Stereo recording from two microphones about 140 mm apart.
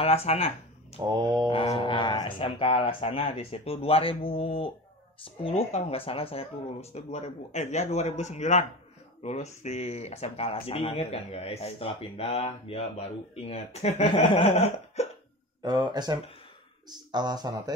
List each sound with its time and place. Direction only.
0.0 s speech: 45° left (ahead or behind)
1.0 s speech: 30° right (ahead or behind)
1.5 s speech: 40° left (ahead or behind)
14.1 s speech: 40° left (ahead or behind)
15.0 s hiccup: 50° left (ahead or behind)
15.6 s speech: 30° right (ahead or behind)